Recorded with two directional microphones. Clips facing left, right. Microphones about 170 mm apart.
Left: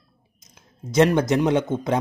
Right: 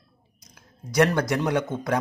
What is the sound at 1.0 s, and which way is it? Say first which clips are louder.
Speech: left 5 dB; 20° left (ahead or behind).